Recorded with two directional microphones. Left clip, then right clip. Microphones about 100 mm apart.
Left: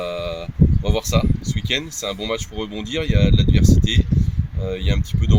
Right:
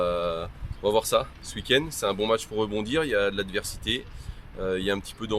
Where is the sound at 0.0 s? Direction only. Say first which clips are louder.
Even; 50° right (ahead or behind).